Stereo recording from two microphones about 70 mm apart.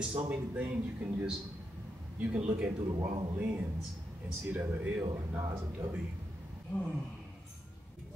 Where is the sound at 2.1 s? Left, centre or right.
Right.